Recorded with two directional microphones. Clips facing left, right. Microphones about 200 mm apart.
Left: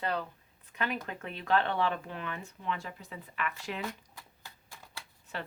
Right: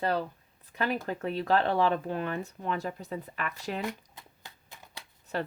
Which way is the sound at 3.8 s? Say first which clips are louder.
Right 4 dB; 20° right (ahead or behind).